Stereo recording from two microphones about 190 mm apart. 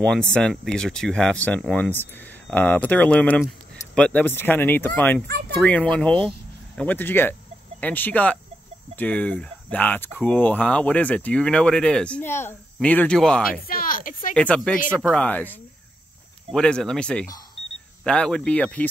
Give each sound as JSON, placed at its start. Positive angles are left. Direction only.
{"t": 0.0, "sound": "speech", "side_deg": 5}
{"t": 13.7, "sound": "speech", "side_deg": 50}
{"t": 14.3, "sound": "speech", "side_deg": 5}
{"t": 16.5, "sound": "speech", "side_deg": 5}